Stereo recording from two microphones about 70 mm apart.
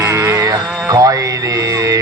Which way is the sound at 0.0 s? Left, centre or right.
Right.